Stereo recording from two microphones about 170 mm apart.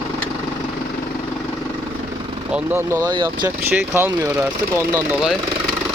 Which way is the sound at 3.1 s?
25° right (ahead or behind).